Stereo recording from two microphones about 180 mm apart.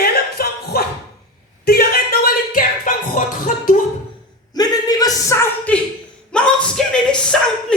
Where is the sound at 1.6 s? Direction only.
60° left (ahead or behind).